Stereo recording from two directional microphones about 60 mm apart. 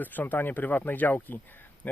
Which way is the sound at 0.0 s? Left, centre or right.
Left.